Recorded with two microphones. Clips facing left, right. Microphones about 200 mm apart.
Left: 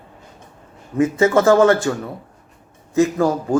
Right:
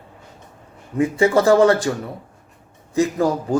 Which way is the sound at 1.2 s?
15° right (ahead or behind).